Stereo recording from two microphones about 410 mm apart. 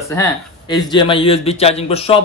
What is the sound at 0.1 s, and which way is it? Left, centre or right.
Speech, centre.